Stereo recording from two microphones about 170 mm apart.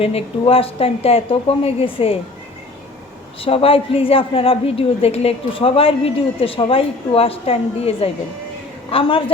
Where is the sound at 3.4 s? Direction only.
35° left (ahead or behind).